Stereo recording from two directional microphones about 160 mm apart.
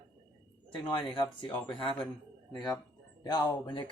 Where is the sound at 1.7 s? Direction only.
35° left (ahead or behind).